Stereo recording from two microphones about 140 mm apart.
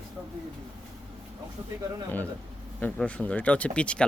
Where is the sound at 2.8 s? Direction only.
10° left (ahead or behind).